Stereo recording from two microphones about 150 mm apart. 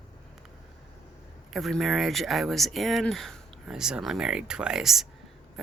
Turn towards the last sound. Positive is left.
turn(degrees=0)  # may be behind; listen again after turning